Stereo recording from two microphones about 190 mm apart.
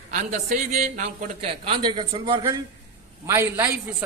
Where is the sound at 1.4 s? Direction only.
30° right (ahead or behind).